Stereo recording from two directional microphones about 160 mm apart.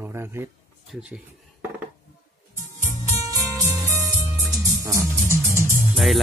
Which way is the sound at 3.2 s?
20° right (ahead or behind).